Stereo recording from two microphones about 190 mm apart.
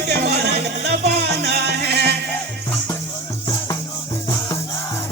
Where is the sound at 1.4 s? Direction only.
60° right (ahead or behind).